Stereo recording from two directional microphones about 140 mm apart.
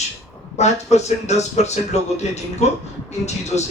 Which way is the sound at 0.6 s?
55° left (ahead or behind).